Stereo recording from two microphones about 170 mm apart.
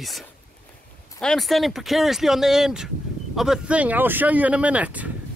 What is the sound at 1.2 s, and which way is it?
Speech, centre (ahead or behind).